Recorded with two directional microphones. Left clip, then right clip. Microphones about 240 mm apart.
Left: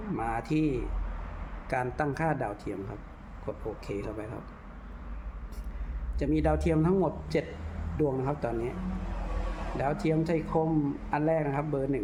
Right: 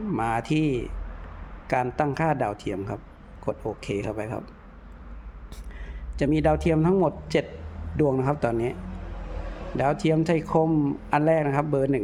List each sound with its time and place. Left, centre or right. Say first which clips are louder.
0.2 s a man's voice: right 5 dB; right
6.1 s a man's voice: right 6 dB; right
9.7 s a man's voice: right 6 dB; right